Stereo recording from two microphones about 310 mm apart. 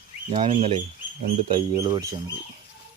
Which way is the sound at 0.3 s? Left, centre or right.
Centre.